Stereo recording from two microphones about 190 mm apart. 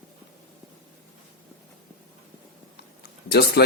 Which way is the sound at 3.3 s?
60° left (ahead or behind).